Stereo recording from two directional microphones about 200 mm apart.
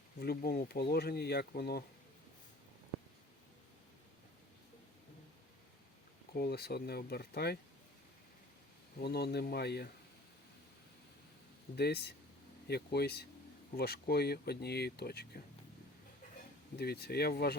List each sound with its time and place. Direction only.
0.2 s speech: 50° left (ahead or behind)
6.3 s speech: 50° left (ahead or behind)
9.0 s speech: 55° left (ahead or behind)
11.8 s speech: 55° left (ahead or behind)
16.7 s speech: 55° left (ahead or behind)